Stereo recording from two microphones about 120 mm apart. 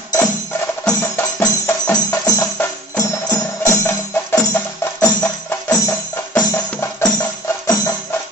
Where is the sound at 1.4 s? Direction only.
30° left (ahead or behind).